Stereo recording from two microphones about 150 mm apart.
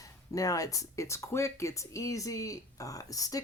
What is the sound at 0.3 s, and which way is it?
Speech, 20° left (ahead or behind).